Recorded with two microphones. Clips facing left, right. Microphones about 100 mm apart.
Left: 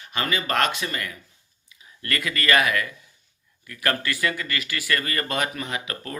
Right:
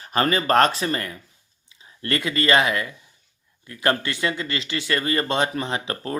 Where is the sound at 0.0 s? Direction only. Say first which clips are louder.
Right 6 dB; 40° right (ahead or behind).